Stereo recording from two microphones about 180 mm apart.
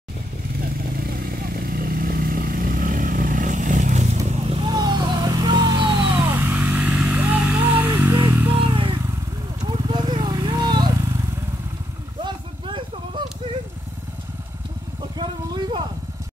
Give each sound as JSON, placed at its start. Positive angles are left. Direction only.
{"t": 1.4, "sound": "vehicle", "side_deg": -55}
{"t": 4.5, "sound": "vehicle", "side_deg": -25}
{"t": 6.2, "sound": "vehicle", "side_deg": -10}
{"t": 8.0, "sound": "a sound", "side_deg": -15}
{"t": 8.7, "sound": "vehicle", "side_deg": -30}
{"t": 12.2, "sound": "vehicle", "side_deg": -25}
{"t": 15.1, "sound": "vehicle", "side_deg": -25}